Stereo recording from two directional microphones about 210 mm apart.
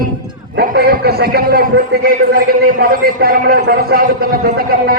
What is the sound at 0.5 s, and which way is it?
A man's voice, 45° right (ahead or behind).